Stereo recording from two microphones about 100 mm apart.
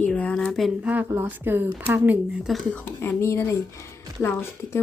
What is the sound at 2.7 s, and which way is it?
Speech, 20° left (ahead or behind).